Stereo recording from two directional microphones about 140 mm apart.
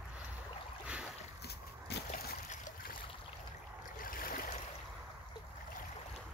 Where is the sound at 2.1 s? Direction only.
65° left (ahead or behind).